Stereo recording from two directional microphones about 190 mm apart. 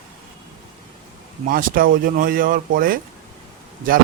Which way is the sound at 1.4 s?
45° right (ahead or behind).